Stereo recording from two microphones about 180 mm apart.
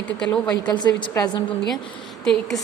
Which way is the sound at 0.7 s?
25° left (ahead or behind).